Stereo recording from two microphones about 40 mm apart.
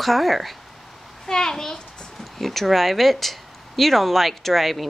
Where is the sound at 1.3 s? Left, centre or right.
Centre.